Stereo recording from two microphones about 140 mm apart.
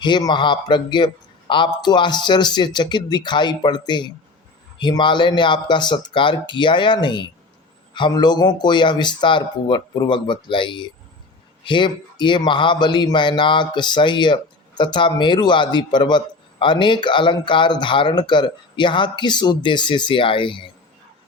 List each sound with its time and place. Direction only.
0.0 s a man's voice: 30° left (ahead or behind)